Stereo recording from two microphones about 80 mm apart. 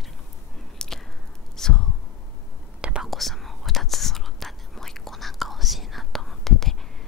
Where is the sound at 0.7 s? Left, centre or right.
Centre.